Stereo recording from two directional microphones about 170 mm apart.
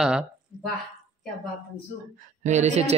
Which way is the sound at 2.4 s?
45° right (ahead or behind).